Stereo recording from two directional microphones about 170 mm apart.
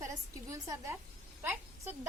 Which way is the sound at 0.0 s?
20° right (ahead or behind).